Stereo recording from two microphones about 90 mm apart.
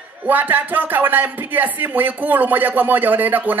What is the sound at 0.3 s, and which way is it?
Speech, 20° right (ahead or behind).